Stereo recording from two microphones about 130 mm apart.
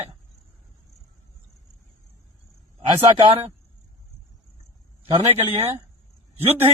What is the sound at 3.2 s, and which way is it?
Speech, 40° right (ahead or behind).